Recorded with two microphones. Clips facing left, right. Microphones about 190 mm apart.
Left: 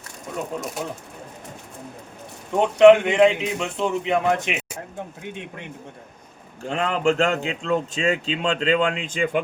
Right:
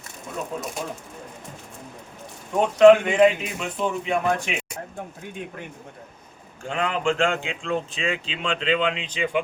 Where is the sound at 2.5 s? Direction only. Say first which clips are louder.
Left 1 dB; 20° left (ahead or behind).